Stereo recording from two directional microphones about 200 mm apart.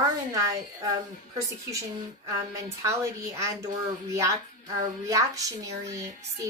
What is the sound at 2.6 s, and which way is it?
Speech, 15° right (ahead or behind).